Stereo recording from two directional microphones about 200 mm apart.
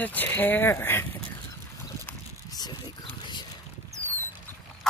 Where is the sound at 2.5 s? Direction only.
20° left (ahead or behind).